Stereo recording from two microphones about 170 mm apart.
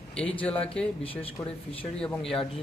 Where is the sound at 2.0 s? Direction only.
5° left (ahead or behind).